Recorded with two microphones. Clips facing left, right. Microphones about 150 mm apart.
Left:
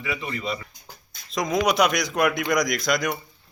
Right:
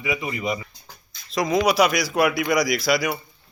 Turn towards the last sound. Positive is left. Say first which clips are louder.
# right 2 dB
turn(degrees=-5)  # may be behind; listen again after turning